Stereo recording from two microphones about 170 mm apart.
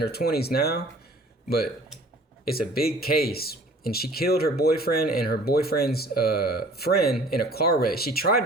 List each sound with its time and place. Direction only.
0.0 s speech: 70° left (ahead or behind)